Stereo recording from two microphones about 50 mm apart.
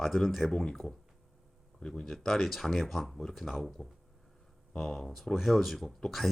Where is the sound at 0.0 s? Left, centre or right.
Centre.